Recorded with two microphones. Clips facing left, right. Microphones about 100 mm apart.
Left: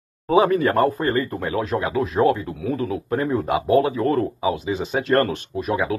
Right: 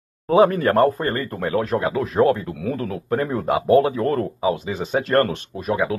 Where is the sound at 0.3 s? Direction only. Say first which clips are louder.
Right 1 dB; 45° right (ahead or behind).